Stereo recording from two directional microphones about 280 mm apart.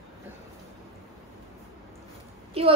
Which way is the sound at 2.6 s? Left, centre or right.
Right.